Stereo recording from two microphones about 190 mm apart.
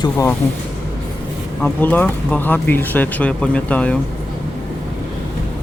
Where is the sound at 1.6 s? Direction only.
10° left (ahead or behind).